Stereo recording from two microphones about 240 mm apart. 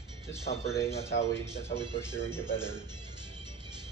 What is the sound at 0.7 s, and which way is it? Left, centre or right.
Speech, centre.